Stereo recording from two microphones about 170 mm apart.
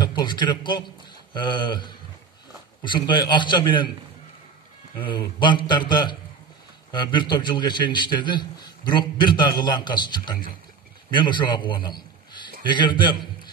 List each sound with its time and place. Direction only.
0.0 s a man's voice: 25° left (ahead or behind)
4.9 s a man's voice: 30° left (ahead or behind)